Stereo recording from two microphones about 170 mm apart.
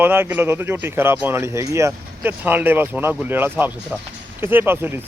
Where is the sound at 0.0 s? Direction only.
10° right (ahead or behind).